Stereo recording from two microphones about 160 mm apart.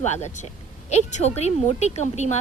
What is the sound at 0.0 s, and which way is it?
A woman's voice, 45° left (ahead or behind).